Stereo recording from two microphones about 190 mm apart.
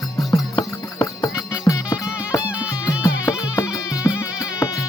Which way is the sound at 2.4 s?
5° right (ahead or behind).